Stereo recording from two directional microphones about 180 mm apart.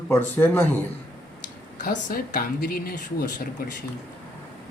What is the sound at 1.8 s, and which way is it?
Speech, 55° left (ahead or behind).